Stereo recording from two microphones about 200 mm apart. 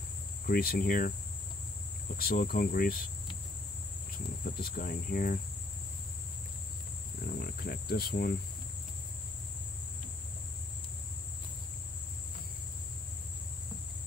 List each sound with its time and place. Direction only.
0.5 s cricket: 50° left (ahead or behind)
2.1 s cricket: 50° left (ahead or behind)
4.5 s cricket: 45° left (ahead or behind)
7.2 s speech: 50° left (ahead or behind)